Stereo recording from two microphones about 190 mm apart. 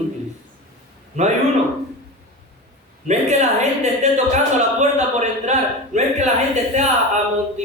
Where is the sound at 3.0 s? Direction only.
40° right (ahead or behind).